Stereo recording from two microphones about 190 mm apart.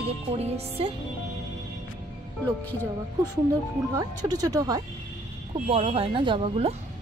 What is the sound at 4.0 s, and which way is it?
Speech, 20° right (ahead or behind).